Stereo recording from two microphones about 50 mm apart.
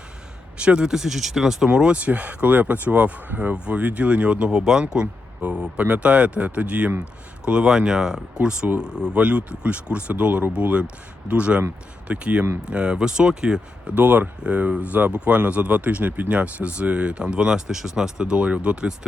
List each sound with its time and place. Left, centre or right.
0.5 s speech: right; by 1.7 s centre
1.7 s speech: centre
2.0 s speech: right
4.6 s speech: centre
13.9 s speech: right